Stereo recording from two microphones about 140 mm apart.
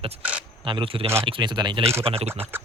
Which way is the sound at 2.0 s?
45° right (ahead or behind).